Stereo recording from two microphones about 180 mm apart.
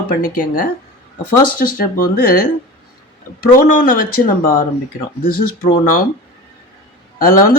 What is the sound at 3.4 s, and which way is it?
Speech, 50° left (ahead or behind).